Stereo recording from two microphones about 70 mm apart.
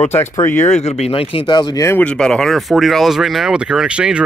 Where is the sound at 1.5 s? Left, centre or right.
Left.